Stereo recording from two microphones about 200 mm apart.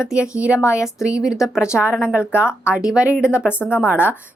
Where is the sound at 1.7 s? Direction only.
Centre (ahead or behind).